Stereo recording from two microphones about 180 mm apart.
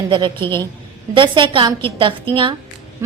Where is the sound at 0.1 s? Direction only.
25° right (ahead or behind).